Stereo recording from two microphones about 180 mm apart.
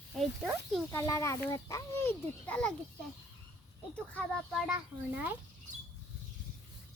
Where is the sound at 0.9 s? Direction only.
15° left (ahead or behind).